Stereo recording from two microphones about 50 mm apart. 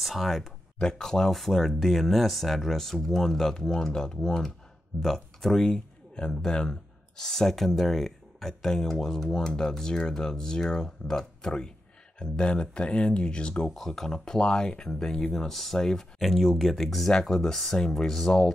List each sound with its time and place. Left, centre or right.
0.0 s speech: centre
0.7 s speech: centre
5.6 s speech: centre
13.7 s speech: centre